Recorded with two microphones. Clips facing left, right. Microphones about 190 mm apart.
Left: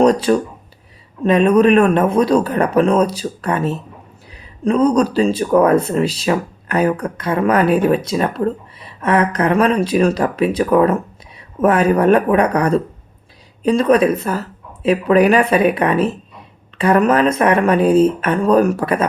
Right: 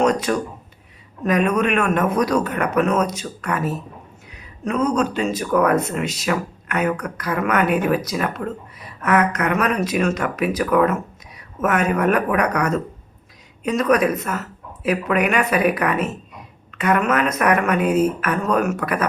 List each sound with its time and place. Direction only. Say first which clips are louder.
0.0 s speech: left 6 dB; 30° left (ahead or behind)